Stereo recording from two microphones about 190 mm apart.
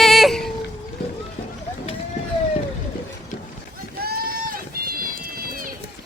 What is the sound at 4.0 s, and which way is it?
Run, 50° right (ahead or behind).